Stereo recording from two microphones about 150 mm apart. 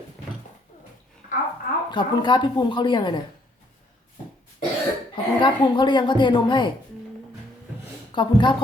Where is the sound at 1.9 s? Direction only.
30° left (ahead or behind).